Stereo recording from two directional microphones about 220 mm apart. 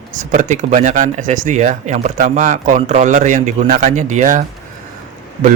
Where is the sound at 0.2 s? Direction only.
35° right (ahead or behind).